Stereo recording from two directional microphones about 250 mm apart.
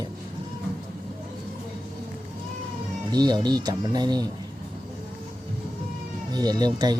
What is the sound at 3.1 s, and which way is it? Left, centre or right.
Speech, centre.